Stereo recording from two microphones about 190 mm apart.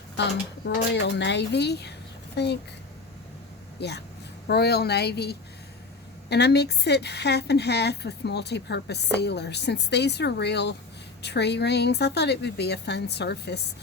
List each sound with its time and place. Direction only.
0.9 s a woman's voice: 65° left (ahead or behind)
3.8 s a woman's voice: 60° left (ahead or behind)